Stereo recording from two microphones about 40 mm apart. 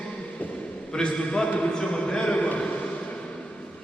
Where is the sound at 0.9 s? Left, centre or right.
Left.